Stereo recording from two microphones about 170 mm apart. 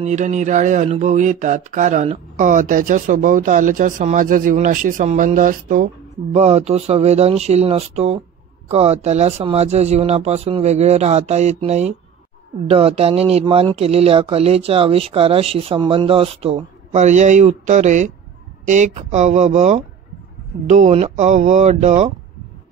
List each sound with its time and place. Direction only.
0.0 s speech: 45° right (ahead or behind)
6.3 s speech: 40° right (ahead or behind)